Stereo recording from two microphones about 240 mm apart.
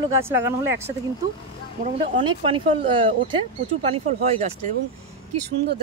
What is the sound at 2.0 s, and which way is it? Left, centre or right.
Speech, right.